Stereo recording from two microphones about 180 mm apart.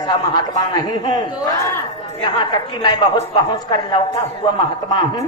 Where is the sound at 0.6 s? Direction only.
20° left (ahead or behind).